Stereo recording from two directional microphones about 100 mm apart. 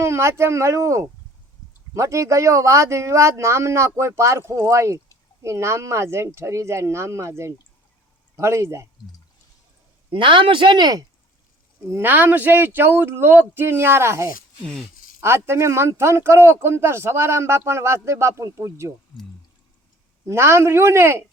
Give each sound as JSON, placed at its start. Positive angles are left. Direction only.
{"t": 0.0, "sound": "speech", "side_deg": -25}
{"t": 10.1, "sound": "a woman's voice", "side_deg": -55}
{"t": 11.9, "sound": "speech", "side_deg": -25}
{"t": 20.2, "sound": "speech", "side_deg": -25}